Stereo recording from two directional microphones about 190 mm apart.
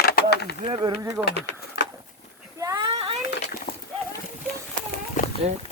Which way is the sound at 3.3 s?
60° left (ahead or behind).